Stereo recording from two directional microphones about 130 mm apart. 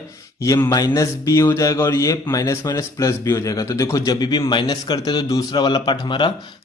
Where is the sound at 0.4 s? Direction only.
25° left (ahead or behind).